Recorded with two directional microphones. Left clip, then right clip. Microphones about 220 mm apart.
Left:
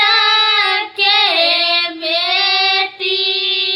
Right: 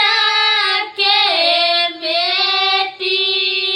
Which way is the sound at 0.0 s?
15° left (ahead or behind).